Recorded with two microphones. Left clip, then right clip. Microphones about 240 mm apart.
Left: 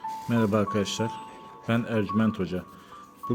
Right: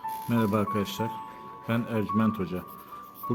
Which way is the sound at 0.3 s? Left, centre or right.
Centre.